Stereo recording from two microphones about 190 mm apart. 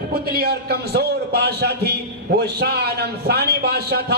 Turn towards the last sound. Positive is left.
turn(degrees=-55)  # may be behind; listen again after turning